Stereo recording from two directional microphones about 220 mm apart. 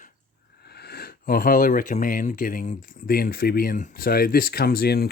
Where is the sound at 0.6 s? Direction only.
45° left (ahead or behind).